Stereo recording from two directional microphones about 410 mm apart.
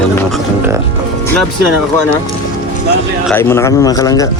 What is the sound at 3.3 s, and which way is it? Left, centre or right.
Speech, centre.